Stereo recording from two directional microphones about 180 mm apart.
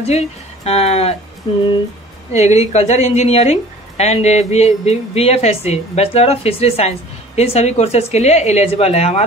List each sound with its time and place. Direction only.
0.0 s speech: 35° left (ahead or behind)
1.5 s music: 25° left (ahead or behind)
2.3 s a woman's voice: 40° left (ahead or behind)